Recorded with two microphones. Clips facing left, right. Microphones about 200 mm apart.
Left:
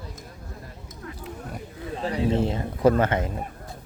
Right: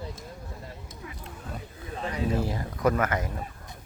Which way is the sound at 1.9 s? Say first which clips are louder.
Left 4 dB; 30° left (ahead or behind).